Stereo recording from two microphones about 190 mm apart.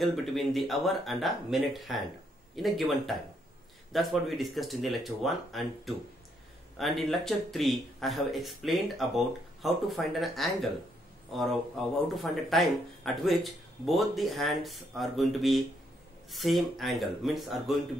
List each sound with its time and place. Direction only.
0.0 s speech: centre (ahead or behind)